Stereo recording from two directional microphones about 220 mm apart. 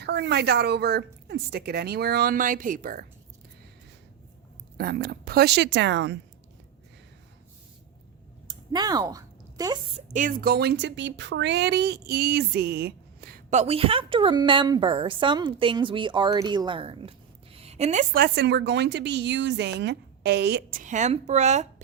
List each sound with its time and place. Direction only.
0.0 s speech: 50° right (ahead or behind)
4.8 s speech: 45° right (ahead or behind)
8.4 s speech: 20° right (ahead or behind)
10.1 s speech: 35° right (ahead or behind)
13.5 s a woman's voice: 30° right (ahead or behind)